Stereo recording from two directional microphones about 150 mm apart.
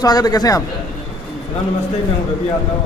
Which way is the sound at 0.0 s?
25° left (ahead or behind).